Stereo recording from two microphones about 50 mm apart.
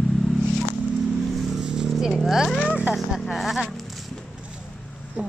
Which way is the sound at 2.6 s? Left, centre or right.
Right.